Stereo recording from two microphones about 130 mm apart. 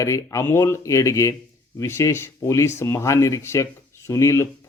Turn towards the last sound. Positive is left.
turn(degrees=20)  # may be behind; listen again after turning